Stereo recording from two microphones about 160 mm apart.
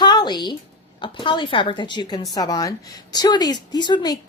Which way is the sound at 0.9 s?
30° left (ahead or behind).